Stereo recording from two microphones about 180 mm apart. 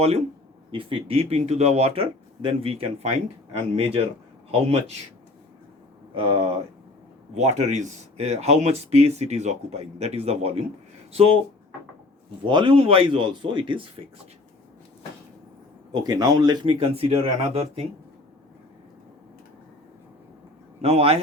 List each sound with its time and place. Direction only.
0.7 s speech: 30° right (ahead or behind)
6.1 s speech: 30° right (ahead or behind)
12.5 s speech: 25° right (ahead or behind)
16.0 s speech: 20° right (ahead or behind)
20.8 s speech: 35° right (ahead or behind)